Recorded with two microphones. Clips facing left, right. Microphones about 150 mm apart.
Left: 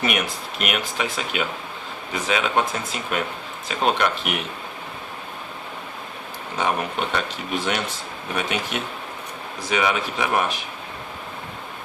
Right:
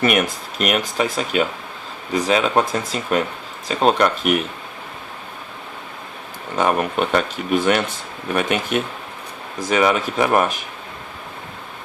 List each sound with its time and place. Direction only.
0.0 s speech: 45° right (ahead or behind)
6.6 s speech: 50° right (ahead or behind)